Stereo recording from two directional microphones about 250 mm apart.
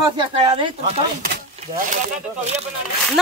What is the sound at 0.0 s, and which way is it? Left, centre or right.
Speech, centre.